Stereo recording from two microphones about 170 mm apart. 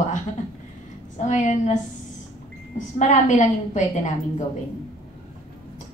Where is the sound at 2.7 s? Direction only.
45° left (ahead or behind).